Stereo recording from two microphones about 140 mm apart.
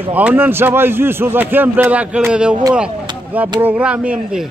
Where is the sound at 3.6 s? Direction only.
10° right (ahead or behind).